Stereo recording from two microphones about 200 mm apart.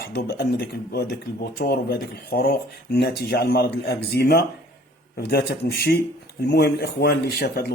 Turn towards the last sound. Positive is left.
turn(degrees=50)  # may be behind; listen again after turning